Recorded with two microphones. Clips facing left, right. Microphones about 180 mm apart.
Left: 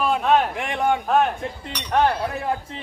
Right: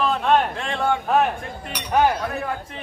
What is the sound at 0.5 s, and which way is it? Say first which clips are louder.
Speech: left 1 dB; 15° left (ahead or behind).